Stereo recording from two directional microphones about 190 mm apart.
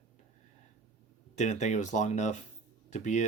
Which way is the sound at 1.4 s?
40° left (ahead or behind).